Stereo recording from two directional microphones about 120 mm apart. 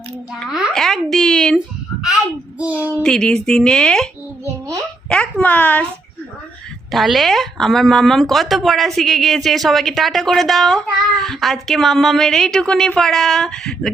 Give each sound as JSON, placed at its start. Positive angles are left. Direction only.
{"t": 0.4, "sound": "speech", "side_deg": -5}
{"t": 1.5, "sound": "baby cry", "side_deg": -5}
{"t": 3.0, "sound": "a woman's voice", "side_deg": 5}
{"t": 6.9, "sound": "speech", "side_deg": 0}